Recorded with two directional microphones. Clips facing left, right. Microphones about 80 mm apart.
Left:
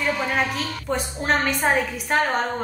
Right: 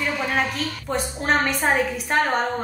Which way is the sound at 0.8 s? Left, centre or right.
Centre.